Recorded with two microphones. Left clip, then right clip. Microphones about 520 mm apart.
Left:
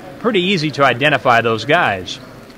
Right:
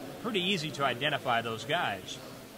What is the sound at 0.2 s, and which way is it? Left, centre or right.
Speech, left.